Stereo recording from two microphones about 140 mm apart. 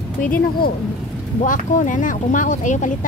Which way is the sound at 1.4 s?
70° left (ahead or behind).